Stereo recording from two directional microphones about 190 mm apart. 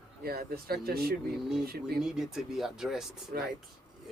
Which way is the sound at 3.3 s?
50° right (ahead or behind).